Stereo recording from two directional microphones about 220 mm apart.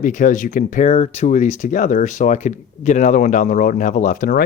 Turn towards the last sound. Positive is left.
turn(degrees=40)  # may be behind; listen again after turning